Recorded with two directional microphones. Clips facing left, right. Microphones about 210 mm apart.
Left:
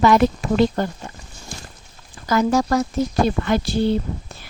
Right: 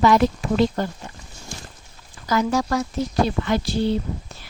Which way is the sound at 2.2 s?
50° left (ahead or behind).